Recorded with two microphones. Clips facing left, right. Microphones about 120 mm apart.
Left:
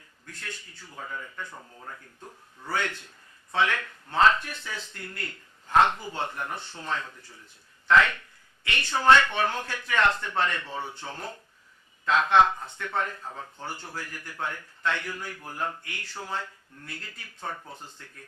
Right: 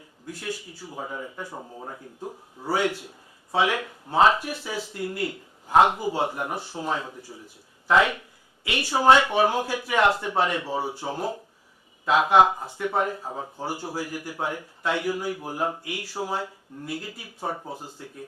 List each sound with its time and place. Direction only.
0.3 s speech: 10° right (ahead or behind)